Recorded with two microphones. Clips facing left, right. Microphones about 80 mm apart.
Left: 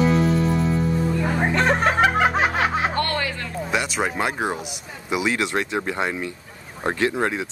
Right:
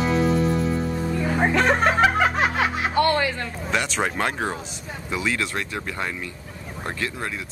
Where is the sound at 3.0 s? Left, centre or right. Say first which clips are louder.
Right 4 dB; right.